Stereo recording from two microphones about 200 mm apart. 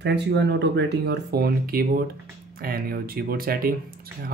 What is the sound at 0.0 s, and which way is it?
Speech, 60° right (ahead or behind).